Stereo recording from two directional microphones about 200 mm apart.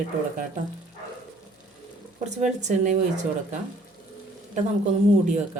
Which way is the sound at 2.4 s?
35° right (ahead or behind).